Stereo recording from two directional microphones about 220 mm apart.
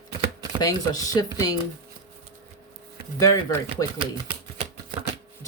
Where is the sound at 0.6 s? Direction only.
15° left (ahead or behind).